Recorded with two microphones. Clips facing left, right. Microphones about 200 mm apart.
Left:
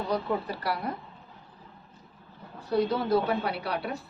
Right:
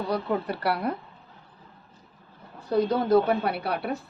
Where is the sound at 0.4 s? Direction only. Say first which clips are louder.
Right 5 dB; 65° right (ahead or behind).